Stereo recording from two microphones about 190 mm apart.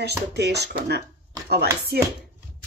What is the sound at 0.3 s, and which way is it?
Speech, 60° right (ahead or behind).